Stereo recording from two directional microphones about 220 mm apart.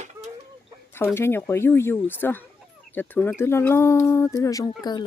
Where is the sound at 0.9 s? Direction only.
10° left (ahead or behind).